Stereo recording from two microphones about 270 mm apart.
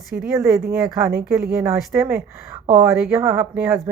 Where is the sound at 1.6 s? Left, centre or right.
Centre.